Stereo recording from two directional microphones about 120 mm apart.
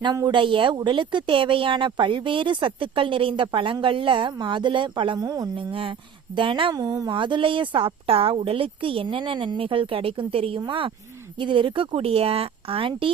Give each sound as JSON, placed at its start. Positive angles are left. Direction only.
{"t": 0.0, "sound": "a woman's voice", "side_deg": -35}
{"t": 5.2, "sound": "speech", "side_deg": -30}
{"t": 5.5, "sound": "a woman's voice", "side_deg": -45}
{"t": 7.1, "sound": "a woman's voice", "side_deg": -45}